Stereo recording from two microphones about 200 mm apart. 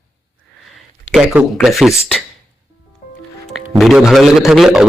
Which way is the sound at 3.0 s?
40° left (ahead or behind).